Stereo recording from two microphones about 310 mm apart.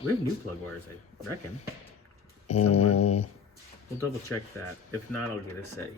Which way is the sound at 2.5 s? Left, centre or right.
Left.